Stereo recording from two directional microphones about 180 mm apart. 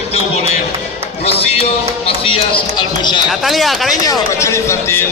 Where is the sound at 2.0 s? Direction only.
30° left (ahead or behind).